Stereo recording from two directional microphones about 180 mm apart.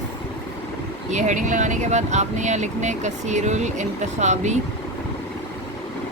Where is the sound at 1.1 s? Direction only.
45° right (ahead or behind).